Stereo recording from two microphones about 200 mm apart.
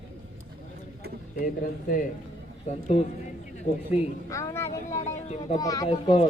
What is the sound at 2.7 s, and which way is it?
Speech, 35° left (ahead or behind).